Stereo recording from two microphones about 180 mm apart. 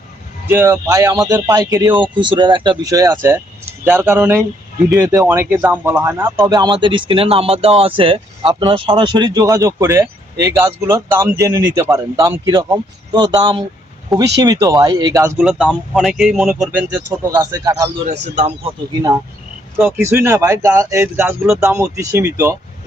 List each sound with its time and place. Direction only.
0.4 s speech: 15° right (ahead or behind)
14.1 s speech: centre (ahead or behind)
14.4 s speech: 20° right (ahead or behind)
15.4 s speech: centre (ahead or behind); by 17.8 s 20° right (ahead or behind)
18.1 s speech: 35° right (ahead or behind)
20.0 s speech: 15° right (ahead or behind)